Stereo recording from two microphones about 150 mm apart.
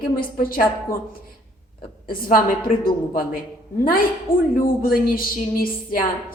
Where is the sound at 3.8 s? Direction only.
70° left (ahead or behind).